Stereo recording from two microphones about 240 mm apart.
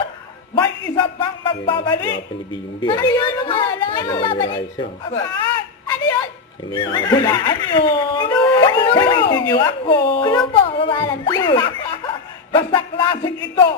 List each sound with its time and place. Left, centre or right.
0.5 s music: centre
2.8 s a woman's voice: centre